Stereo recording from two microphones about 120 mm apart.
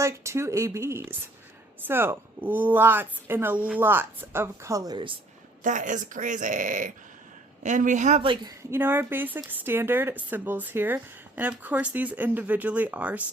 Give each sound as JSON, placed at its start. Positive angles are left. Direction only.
{"t": 0.0, "sound": "speech", "side_deg": -25}
{"t": 5.6, "sound": "speech", "side_deg": -90}
{"t": 8.7, "sound": "speech", "side_deg": -20}